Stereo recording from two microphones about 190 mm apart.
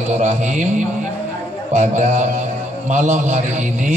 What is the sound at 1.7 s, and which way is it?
Mantra, 40° right (ahead or behind).